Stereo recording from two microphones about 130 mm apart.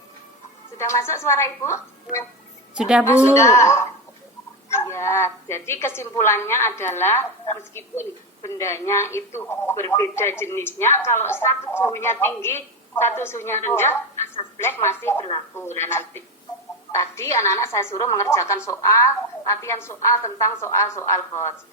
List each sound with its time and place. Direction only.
0.8 s speech: 20° left (ahead or behind)
2.7 s a woman's voice: 5° right (ahead or behind)
3.3 s speech: 20° left (ahead or behind)